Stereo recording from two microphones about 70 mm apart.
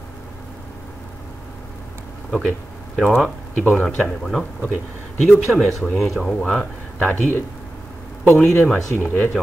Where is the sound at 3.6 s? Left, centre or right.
Left.